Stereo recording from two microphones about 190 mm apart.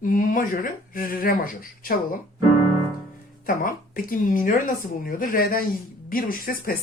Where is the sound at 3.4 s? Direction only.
45° left (ahead or behind).